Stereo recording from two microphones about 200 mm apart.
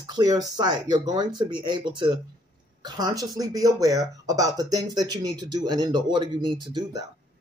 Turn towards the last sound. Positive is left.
turn(degrees=-20)  # may be behind; listen again after turning